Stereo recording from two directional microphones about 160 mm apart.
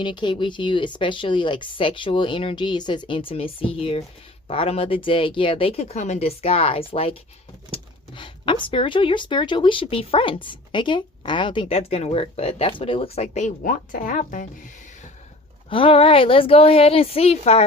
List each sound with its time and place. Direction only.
0.0 s speech: 30° left (ahead or behind); by 14.7 s 55° left (ahead or behind)
15.7 s speech: 35° left (ahead or behind)